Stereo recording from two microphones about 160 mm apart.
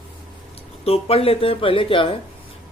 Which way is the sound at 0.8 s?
40° left (ahead or behind).